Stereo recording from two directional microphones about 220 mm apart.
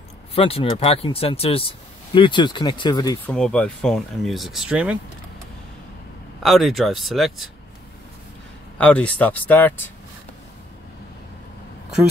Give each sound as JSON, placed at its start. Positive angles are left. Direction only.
{"t": 0.3, "sound": "speech", "side_deg": 25}
{"t": 3.3, "sound": "speech", "side_deg": 5}
{"t": 6.4, "sound": "speech", "side_deg": 0}
{"t": 8.7, "sound": "speech", "side_deg": 5}